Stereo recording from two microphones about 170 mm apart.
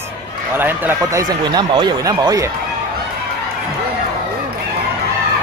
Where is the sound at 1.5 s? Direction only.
25° right (ahead or behind).